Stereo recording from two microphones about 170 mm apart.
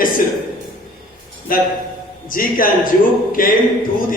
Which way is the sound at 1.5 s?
55° left (ahead or behind).